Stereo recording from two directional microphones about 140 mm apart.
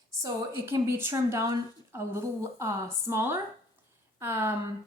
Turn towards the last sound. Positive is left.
turn(degrees=-15)  # may be behind; listen again after turning